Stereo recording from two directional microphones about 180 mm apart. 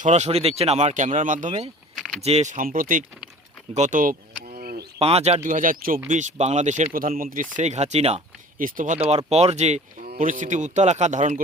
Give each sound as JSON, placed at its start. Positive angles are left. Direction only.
{"t": 0.0, "sound": "speech", "side_deg": -40}
{"t": 3.8, "sound": "a sound", "side_deg": -45}
{"t": 4.9, "sound": "speech", "side_deg": -35}
{"t": 5.5, "sound": "speech", "side_deg": -50}
{"t": 8.5, "sound": "speech", "side_deg": -50}
{"t": 9.0, "sound": "speech", "side_deg": -35}
{"t": 10.0, "sound": "speech", "side_deg": -50}